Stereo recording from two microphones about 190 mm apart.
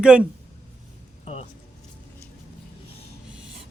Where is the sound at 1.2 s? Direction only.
30° left (ahead or behind).